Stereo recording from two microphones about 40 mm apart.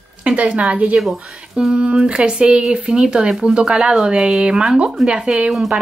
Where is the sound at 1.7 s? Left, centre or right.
Right.